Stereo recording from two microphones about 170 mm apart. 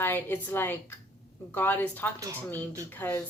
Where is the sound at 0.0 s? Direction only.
10° left (ahead or behind).